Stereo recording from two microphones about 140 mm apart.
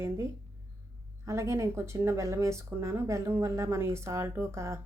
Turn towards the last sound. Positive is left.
turn(degrees=-20)  # may be behind; listen again after turning